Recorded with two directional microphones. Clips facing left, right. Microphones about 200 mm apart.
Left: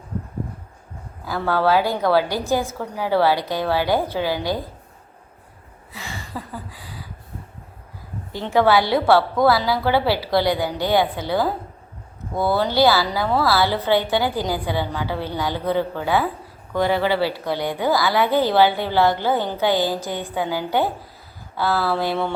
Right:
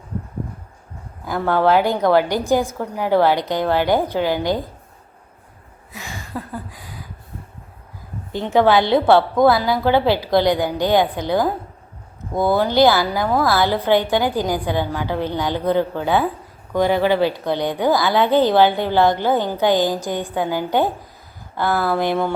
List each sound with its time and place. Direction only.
1.2 s a woman's voice: 20° right (ahead or behind)
6.0 s a sound: 15° right (ahead or behind)
8.3 s a woman's voice: 20° right (ahead or behind)